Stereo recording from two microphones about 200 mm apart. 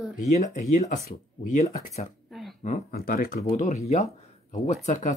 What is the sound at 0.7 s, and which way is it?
Speech, 35° left (ahead or behind).